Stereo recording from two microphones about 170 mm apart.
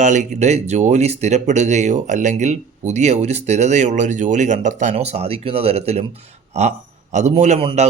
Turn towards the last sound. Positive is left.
turn(degrees=-35)  # may be behind; listen again after turning